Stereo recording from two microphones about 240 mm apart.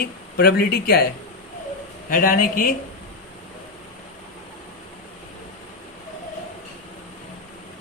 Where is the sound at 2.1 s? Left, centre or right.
Left.